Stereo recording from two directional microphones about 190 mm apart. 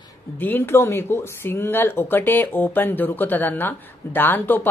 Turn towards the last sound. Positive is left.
turn(degrees=10)  # may be behind; listen again after turning